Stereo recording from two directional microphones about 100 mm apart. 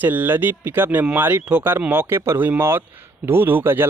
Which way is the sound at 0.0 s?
20° right (ahead or behind).